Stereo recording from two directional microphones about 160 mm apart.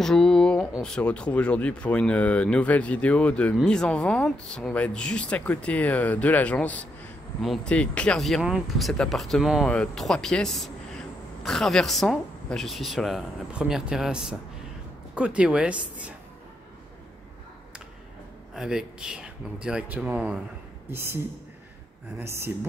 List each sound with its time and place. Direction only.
0.0 s speech: 5° left (ahead or behind)
18.5 s speech: 5° right (ahead or behind)
22.2 s speech: 15° right (ahead or behind)